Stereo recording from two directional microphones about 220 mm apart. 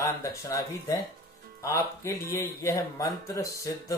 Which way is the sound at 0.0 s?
15° left (ahead or behind).